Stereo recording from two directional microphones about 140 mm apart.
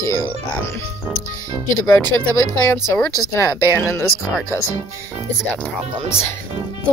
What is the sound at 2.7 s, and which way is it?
Speech, 20° left (ahead or behind).